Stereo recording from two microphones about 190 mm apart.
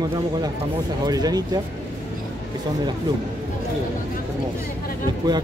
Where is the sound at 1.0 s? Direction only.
20° right (ahead or behind).